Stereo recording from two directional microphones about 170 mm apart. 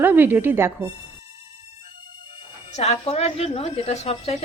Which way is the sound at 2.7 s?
40° left (ahead or behind).